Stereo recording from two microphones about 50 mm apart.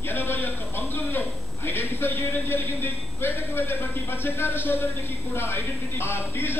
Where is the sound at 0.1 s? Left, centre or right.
Left.